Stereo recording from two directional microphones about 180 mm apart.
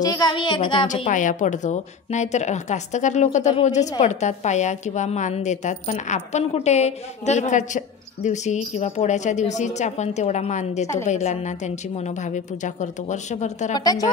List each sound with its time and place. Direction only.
0.0 s a woman's voice: 20° left (ahead or behind)
1.0 s a woman's voice: 45° left (ahead or behind)
13.7 s a woman's voice: 20° left (ahead or behind)